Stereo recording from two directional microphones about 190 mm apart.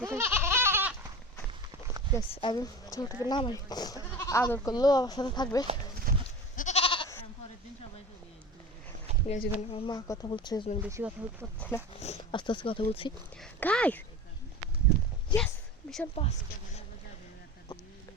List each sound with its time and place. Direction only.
0.0 s goat: 15° right (ahead or behind)
2.3 s speech: 25° left (ahead or behind)
6.1 s goat: 50° right (ahead or behind)
6.6 s goat: 35° left (ahead or behind)
9.2 s speech: 35° left (ahead or behind)
10.8 s speech: 10° right (ahead or behind)
11.9 s speech: 35° left (ahead or behind)
13.4 s speech: 5° left (ahead or behind)
15.4 s a sound: centre (ahead or behind)